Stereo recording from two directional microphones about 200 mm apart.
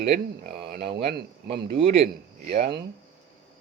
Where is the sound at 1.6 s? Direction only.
30° right (ahead or behind).